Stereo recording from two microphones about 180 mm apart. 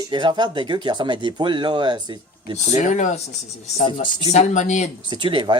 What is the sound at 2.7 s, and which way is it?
Speech, 40° left (ahead or behind).